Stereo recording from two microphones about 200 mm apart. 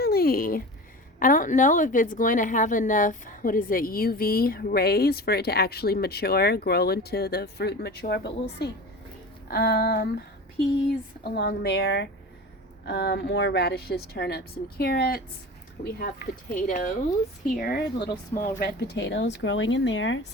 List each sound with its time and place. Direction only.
0.0 s a sound: 50° left (ahead or behind)
1.2 s a woman's voice: 40° left (ahead or behind)
17.6 s a woman's voice: 50° left (ahead or behind); by 20.2 s 70° left (ahead or behind)